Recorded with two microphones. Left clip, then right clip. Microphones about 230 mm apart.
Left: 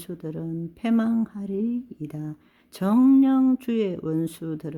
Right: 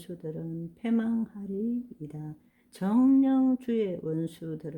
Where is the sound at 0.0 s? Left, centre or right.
Left.